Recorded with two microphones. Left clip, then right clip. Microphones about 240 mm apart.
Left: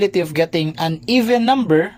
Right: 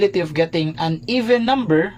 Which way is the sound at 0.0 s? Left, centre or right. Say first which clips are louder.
Left 1 dB; left.